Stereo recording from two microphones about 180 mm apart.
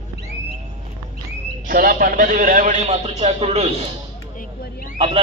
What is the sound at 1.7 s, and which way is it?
A man's voice, 50° right (ahead or behind).